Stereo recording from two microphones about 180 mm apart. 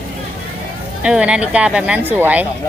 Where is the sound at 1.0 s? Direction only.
5° right (ahead or behind).